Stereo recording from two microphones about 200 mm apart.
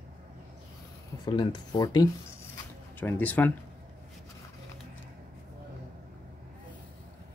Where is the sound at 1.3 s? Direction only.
20° left (ahead or behind).